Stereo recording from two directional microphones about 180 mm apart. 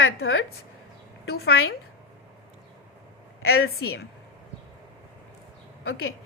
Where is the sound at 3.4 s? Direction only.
60° left (ahead or behind).